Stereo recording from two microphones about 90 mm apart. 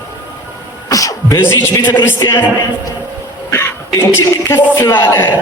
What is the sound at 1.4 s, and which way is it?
A man's voice, 25° left (ahead or behind).